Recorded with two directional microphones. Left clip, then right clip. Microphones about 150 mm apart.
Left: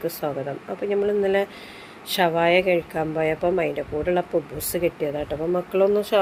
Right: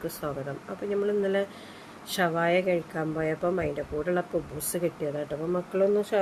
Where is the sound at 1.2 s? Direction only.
10° left (ahead or behind).